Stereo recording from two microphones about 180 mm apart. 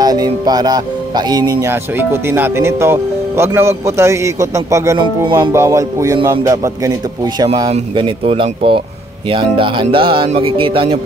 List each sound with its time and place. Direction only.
0.0 s speech: 20° right (ahead or behind)
5.5 s speech: 15° right (ahead or behind)